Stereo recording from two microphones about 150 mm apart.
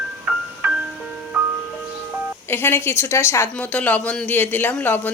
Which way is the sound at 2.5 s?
15° left (ahead or behind).